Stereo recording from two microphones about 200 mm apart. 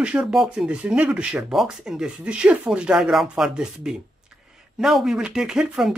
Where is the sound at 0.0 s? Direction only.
5° right (ahead or behind).